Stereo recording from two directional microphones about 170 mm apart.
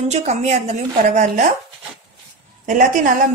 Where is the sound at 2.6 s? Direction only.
50° right (ahead or behind).